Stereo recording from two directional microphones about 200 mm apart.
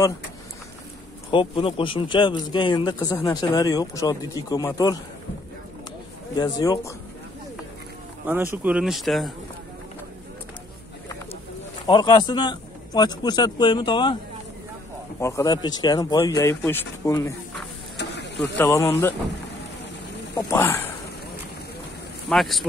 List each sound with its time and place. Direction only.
1.3 s a man's voice: 25° left (ahead or behind)
6.3 s speech: 20° left (ahead or behind)
8.6 s speech: 5° right (ahead or behind)
11.8 s a man's voice: 20° left (ahead or behind)
15.1 s speech: 15° left (ahead or behind)
17.9 s a sound: 60° left (ahead or behind)
18.6 s speech: 15° left (ahead or behind)
20.3 s speech: 15° left (ahead or behind)
22.3 s speech: centre (ahead or behind)